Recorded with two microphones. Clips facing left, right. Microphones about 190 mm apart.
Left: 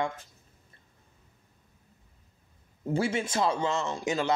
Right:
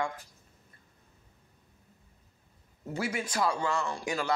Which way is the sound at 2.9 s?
25° left (ahead or behind).